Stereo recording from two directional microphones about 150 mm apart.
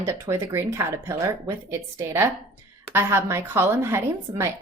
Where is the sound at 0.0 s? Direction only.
20° right (ahead or behind).